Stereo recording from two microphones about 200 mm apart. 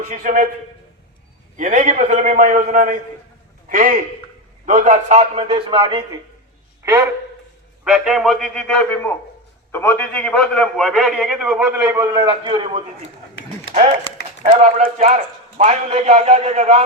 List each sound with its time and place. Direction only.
0.0 s a man's voice: 40° right (ahead or behind)
1.5 s a man's voice: 40° right (ahead or behind)
6.8 s a man's voice: 15° right (ahead or behind)
7.9 s a man's voice: centre (ahead or behind); by 12.8 s 25° right (ahead or behind)
14.4 s a man's voice: 30° right (ahead or behind)